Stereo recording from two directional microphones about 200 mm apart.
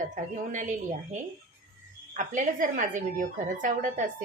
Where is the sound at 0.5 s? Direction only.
40° right (ahead or behind).